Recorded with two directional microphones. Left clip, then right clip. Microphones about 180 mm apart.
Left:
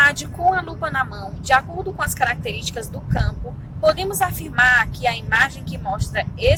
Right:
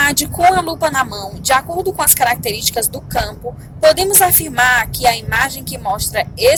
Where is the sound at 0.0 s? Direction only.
20° right (ahead or behind).